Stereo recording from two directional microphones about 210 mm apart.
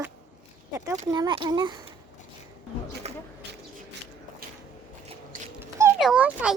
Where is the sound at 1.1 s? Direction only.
20° right (ahead or behind).